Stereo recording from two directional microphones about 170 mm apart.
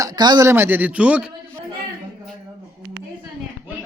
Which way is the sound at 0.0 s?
25° right (ahead or behind).